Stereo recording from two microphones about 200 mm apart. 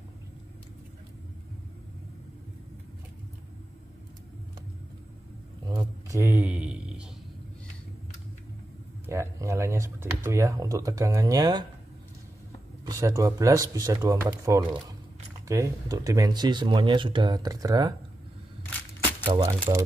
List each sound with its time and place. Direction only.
5.8 s a sound: 15° right (ahead or behind)
9.0 s speech: 15° right (ahead or behind)
12.8 s speech: 15° right (ahead or behind)
19.2 s speech: 25° right (ahead or behind)